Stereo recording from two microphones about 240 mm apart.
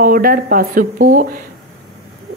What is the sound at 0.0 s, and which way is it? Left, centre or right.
A woman's voice, right.